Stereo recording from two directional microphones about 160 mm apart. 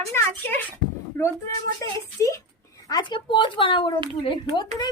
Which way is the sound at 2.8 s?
25° left (ahead or behind).